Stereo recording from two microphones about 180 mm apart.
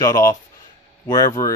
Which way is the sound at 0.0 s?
20° left (ahead or behind).